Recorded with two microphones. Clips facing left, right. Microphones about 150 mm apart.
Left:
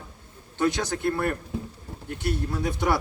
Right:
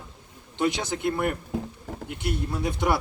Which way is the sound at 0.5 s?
15° right (ahead or behind).